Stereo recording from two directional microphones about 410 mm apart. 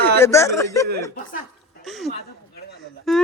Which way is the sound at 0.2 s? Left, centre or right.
Centre.